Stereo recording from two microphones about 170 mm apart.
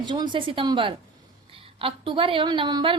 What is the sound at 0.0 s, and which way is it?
A woman's voice, 25° right (ahead or behind).